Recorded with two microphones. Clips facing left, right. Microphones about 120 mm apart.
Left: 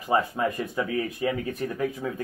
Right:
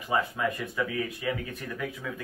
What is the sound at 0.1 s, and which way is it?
Speech, 35° left (ahead or behind).